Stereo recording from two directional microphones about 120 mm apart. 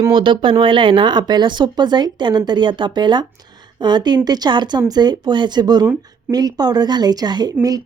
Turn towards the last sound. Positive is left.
turn(degrees=-30)  # may be behind; listen again after turning